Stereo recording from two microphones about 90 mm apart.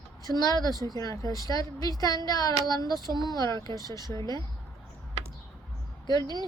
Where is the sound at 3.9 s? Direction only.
35° left (ahead or behind).